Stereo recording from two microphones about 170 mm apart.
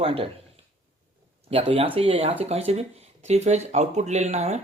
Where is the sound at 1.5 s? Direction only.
35° right (ahead or behind).